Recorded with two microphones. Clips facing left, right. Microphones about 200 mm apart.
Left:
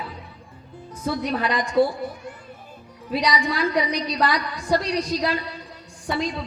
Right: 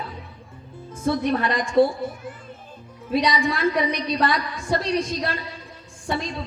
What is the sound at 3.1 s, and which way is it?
A woman's voice, 25° right (ahead or behind).